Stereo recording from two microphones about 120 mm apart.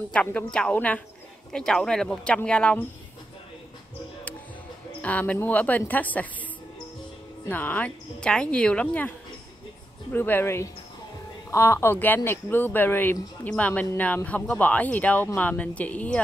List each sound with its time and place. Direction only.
0.1 s speech: 10° left (ahead or behind)
5.0 s speech: 10° left (ahead or behind)
7.4 s speech: 15° left (ahead or behind)
10.1 s a woman's voice: 15° left (ahead or behind)